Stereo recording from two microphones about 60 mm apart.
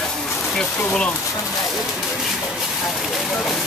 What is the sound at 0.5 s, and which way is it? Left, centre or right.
Speech, centre.